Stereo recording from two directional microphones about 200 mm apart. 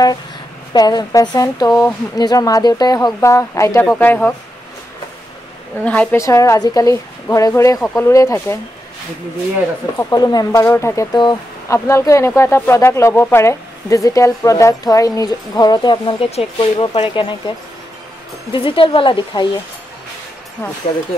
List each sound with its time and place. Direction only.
0.7 s speech: 20° left (ahead or behind)
5.9 s speech: 10° left (ahead or behind)
9.9 s speech: 15° left (ahead or behind)
18.5 s a woman's voice: 25° left (ahead or behind)